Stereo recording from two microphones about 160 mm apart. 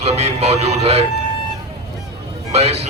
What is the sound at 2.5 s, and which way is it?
Speech, 40° right (ahead or behind).